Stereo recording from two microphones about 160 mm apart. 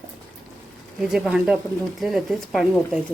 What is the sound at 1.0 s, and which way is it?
Speech, 5° right (ahead or behind).